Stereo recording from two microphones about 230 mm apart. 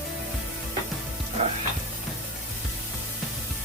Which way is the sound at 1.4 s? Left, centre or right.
Right.